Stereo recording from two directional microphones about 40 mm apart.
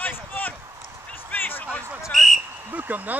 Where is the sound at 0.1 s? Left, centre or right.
Left.